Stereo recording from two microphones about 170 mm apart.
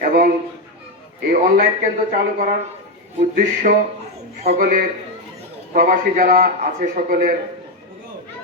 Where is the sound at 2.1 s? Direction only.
55° right (ahead or behind).